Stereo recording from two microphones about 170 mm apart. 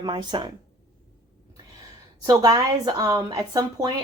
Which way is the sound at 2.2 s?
20° right (ahead or behind).